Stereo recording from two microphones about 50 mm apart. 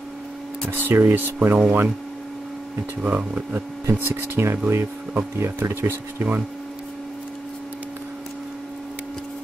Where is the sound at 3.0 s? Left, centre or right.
Right.